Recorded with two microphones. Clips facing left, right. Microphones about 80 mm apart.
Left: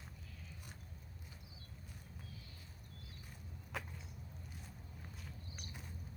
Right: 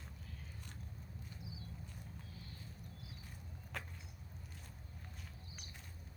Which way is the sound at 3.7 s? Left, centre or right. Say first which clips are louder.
Left 2 dB; centre.